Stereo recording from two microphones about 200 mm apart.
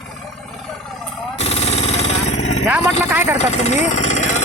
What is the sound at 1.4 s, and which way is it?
Vehicle, 30° left (ahead or behind).